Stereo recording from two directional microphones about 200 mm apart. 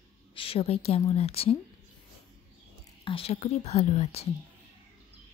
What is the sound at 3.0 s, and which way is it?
Speech, 30° left (ahead or behind).